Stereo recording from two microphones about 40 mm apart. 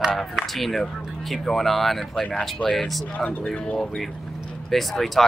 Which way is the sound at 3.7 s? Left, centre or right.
Centre.